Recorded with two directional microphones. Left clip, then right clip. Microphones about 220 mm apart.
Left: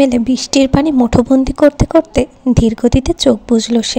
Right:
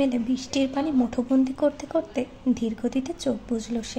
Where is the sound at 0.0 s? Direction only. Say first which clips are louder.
Left 13 dB; 40° left (ahead or behind).